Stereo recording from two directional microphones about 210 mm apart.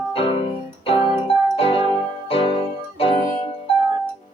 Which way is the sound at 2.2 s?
25° left (ahead or behind).